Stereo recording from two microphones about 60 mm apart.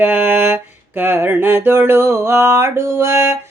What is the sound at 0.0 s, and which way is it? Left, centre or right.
Music, right.